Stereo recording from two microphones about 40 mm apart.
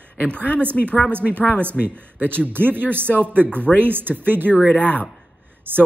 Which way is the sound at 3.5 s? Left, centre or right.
Left.